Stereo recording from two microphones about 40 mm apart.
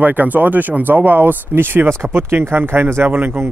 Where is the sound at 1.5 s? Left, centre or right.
Right.